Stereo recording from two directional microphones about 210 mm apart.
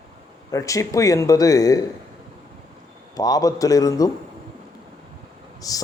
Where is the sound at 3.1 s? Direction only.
15° left (ahead or behind).